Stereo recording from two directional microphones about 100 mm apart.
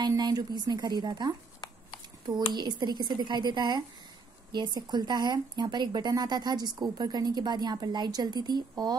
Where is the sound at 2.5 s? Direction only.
50° right (ahead or behind).